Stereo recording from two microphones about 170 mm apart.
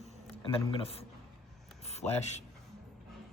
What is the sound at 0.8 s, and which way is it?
Speech, 35° left (ahead or behind).